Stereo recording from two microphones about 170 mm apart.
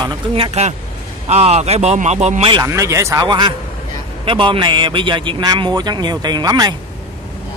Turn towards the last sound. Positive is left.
turn(degrees=-20)  # may be behind; listen again after turning